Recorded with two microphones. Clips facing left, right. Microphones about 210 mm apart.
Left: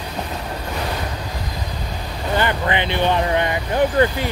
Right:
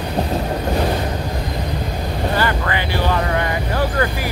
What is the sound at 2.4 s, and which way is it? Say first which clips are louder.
Vehicle: even; 20° left (ahead or behind).